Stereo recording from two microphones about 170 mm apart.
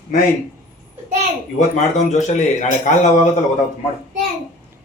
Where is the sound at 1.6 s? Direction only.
45° left (ahead or behind).